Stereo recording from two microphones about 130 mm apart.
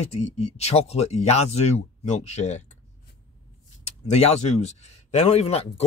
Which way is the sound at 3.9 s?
55° left (ahead or behind).